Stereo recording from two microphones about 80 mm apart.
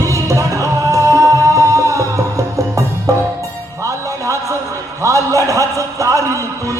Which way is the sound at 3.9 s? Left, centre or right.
Right.